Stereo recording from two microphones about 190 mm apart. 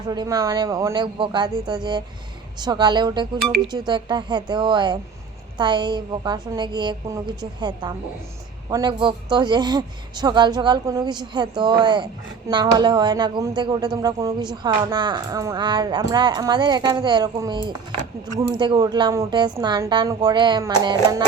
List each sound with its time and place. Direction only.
0.1 s speech: 20° right (ahead or behind)